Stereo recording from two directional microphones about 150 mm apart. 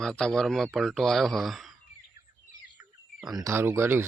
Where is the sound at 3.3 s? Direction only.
20° right (ahead or behind).